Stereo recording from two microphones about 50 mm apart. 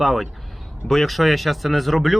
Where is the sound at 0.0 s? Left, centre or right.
Centre.